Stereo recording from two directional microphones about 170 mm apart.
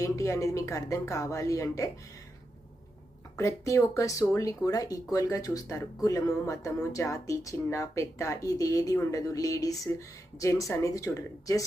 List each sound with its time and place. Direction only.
0.0 s speech: 20° left (ahead or behind)
3.3 s speech: 20° left (ahead or behind)